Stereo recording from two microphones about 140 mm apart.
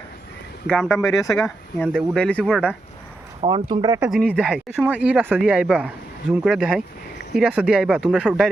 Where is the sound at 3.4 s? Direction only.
35° right (ahead or behind).